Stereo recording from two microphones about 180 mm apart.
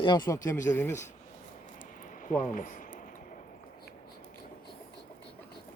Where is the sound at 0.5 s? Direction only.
45° left (ahead or behind).